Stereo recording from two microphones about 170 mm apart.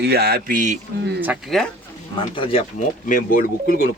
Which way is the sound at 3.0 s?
50° left (ahead or behind).